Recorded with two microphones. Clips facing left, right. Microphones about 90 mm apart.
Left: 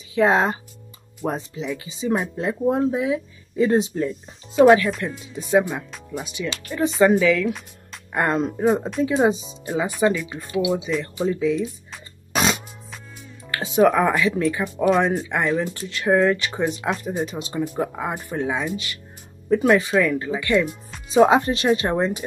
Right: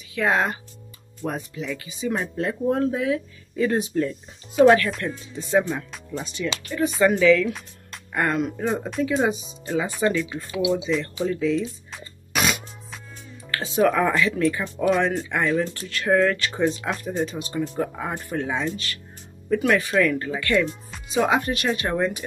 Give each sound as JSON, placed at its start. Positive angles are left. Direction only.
{"t": 0.1, "sound": "speech", "side_deg": 25}
{"t": 3.9, "sound": "speech", "side_deg": 5}
{"t": 8.1, "sound": "speech", "side_deg": 25}
{"t": 9.7, "sound": "speech", "side_deg": 15}
{"t": 12.3, "sound": "music", "side_deg": 30}
{"t": 13.5, "sound": "speech", "side_deg": 15}
{"t": 21.1, "sound": "speech", "side_deg": 30}